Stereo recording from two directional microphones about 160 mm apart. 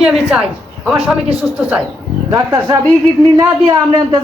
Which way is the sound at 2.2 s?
20° right (ahead or behind).